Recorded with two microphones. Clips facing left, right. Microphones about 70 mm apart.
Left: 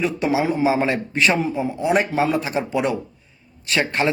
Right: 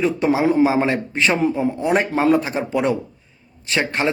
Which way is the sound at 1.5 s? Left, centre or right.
Right.